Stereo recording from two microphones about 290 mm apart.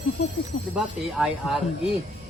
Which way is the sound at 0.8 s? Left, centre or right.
Centre.